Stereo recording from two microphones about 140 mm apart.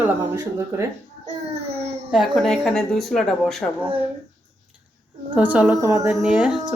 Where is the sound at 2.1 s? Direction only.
Centre (ahead or behind).